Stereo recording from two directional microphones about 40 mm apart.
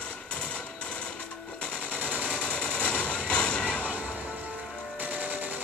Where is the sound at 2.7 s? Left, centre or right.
Left.